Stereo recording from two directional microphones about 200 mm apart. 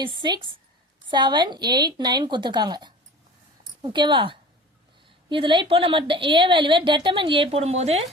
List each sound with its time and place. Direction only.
0.0 s a woman's voice: 25° right (ahead or behind)